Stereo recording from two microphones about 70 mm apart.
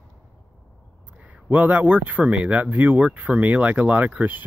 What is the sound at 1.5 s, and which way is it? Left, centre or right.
Speech, right.